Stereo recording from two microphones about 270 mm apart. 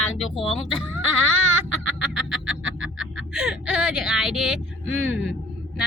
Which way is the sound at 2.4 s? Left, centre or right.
Right.